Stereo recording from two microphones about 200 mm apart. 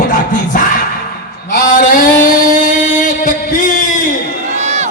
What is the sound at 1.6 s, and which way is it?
Music, 40° left (ahead or behind).